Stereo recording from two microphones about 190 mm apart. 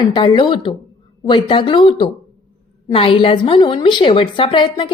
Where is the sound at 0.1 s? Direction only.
25° left (ahead or behind).